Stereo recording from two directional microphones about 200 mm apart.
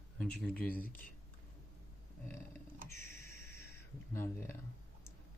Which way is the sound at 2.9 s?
15° left (ahead or behind).